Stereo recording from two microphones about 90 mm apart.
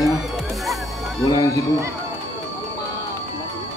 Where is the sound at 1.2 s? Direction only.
45° left (ahead or behind).